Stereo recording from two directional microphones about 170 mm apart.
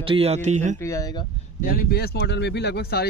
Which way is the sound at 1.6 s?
60° left (ahead or behind).